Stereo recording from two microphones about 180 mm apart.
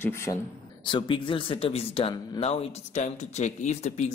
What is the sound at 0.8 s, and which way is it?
Speech, 25° left (ahead or behind).